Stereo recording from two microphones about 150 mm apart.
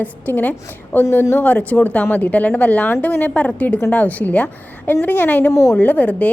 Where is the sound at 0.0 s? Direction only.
10° left (ahead or behind).